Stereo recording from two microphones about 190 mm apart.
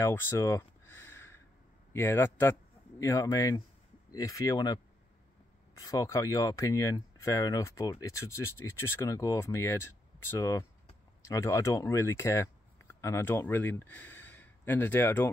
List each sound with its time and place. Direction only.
0.0 s a sound: 15° left (ahead or behind)
1.9 s speech: 10° left (ahead or behind)
5.8 s speech: 15° left (ahead or behind)